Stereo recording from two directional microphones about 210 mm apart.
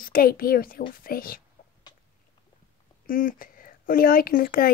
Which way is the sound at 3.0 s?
40° left (ahead or behind).